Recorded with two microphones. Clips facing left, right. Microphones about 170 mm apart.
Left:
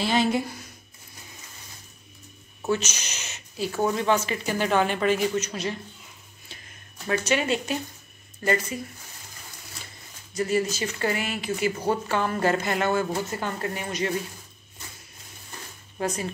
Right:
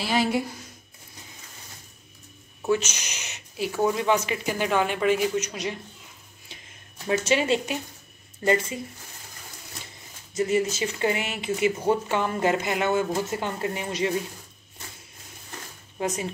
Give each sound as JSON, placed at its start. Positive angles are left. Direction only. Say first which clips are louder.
{"t": 0.0, "sound": "speech", "louder": "left 1 dB", "side_deg": -5}
{"t": 2.7, "sound": "speech", "louder": "right 2 dB", "side_deg": -10}
{"t": 6.5, "sound": "a sound", "louder": "even", "side_deg": -15}
{"t": 7.1, "sound": "speech", "louder": "right 2 dB", "side_deg": -25}
{"t": 10.3, "sound": "speech", "louder": "right 1 dB", "side_deg": -20}
{"t": 16.0, "sound": "speech", "louder": "even", "side_deg": -15}